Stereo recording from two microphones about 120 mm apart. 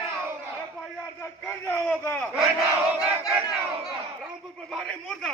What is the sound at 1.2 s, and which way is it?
Speech, 10° left (ahead or behind).